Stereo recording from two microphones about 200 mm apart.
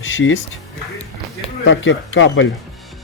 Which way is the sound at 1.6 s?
70° left (ahead or behind).